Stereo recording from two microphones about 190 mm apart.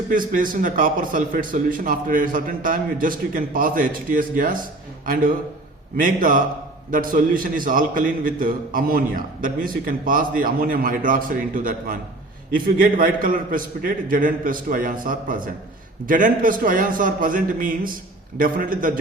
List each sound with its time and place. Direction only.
0.1 s a man's voice: 45° right (ahead or behind)